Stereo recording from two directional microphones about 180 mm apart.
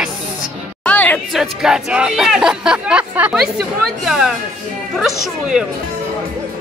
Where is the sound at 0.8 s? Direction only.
10° left (ahead or behind).